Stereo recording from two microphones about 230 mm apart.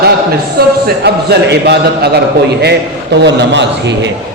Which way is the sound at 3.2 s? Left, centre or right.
Right.